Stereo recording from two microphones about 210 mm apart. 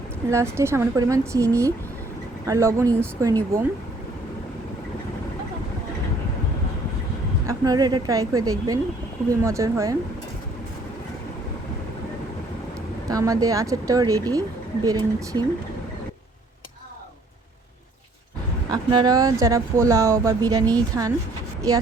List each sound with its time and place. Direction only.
0.3 s speech: 15° right (ahead or behind)
7.4 s speech: 20° right (ahead or behind)
13.1 s speech: 15° right (ahead or behind)
18.7 s speech: 20° right (ahead or behind)